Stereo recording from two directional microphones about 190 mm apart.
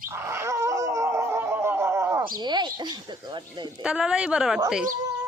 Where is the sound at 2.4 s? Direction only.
25° right (ahead or behind).